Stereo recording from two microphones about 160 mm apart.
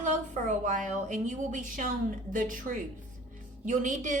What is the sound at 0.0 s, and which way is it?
A woman's voice, 50° right (ahead or behind).